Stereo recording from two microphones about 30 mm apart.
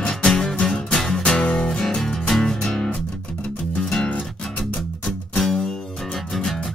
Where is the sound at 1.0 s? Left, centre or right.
Centre.